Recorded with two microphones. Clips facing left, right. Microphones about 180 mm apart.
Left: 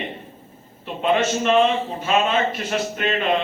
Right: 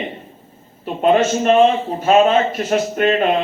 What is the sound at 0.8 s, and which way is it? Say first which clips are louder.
A man's voice: right 6 dB; 45° right (ahead or behind).